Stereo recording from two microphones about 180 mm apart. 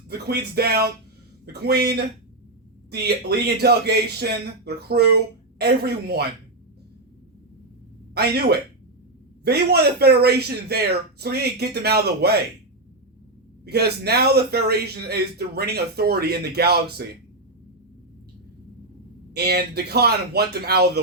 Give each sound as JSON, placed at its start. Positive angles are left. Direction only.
{"t": 0.1, "sound": "speech", "side_deg": -65}
{"t": 8.1, "sound": "speech", "side_deg": -65}
{"t": 13.7, "sound": "speech", "side_deg": -65}
{"t": 19.3, "sound": "speech", "side_deg": -65}